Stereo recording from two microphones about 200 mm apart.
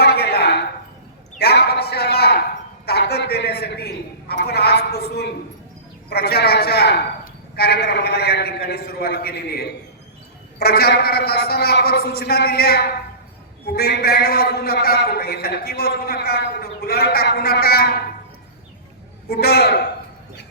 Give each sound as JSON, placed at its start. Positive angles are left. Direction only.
{"t": 0.0, "sound": "a sound", "side_deg": 55}
{"t": 2.8, "sound": "a man's voice", "side_deg": 55}
{"t": 19.3, "sound": "a man's voice", "side_deg": 55}